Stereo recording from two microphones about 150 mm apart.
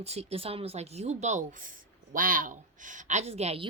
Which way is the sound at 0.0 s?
45° right (ahead or behind).